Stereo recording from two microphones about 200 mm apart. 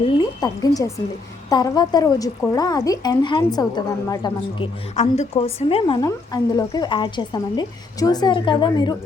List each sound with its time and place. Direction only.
0.0 s a woman's voice: 20° left (ahead or behind)